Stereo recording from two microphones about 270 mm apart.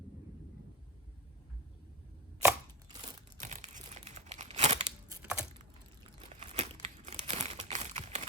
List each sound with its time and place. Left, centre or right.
3.0 s crumpling: right
5.2 s a sound: centre
6.2 s crumpling: right